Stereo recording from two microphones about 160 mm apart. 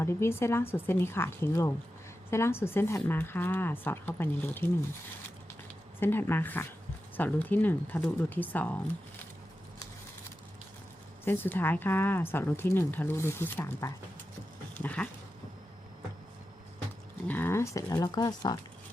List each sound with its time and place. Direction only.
0.0 s speech: 15° left (ahead or behind)
6.0 s speech: 15° left (ahead or behind)
11.3 s speech: 15° left (ahead or behind)
17.2 s speech: 10° left (ahead or behind)